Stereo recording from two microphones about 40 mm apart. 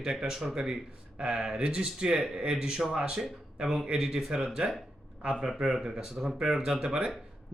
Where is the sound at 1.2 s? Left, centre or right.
Right.